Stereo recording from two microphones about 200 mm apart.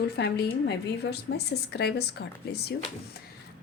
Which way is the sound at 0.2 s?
55° left (ahead or behind).